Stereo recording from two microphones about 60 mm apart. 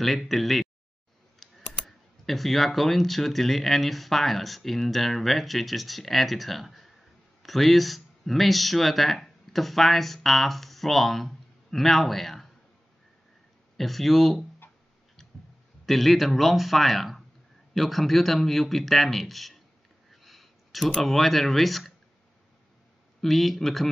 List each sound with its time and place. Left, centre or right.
0.3 s speech: centre
1.4 s typing: centre
1.9 s speech: centre
13.7 s speech: centre
15.8 s speech: centre
20.1 s a sound: centre
23.2 s speech: centre